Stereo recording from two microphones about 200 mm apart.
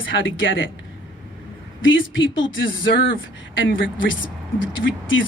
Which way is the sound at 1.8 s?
70° left (ahead or behind).